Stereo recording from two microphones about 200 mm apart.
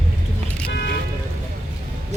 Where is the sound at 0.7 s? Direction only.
60° left (ahead or behind).